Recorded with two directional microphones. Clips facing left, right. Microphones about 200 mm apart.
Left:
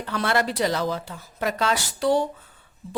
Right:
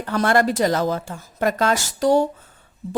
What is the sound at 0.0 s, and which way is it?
Speech, 45° right (ahead or behind).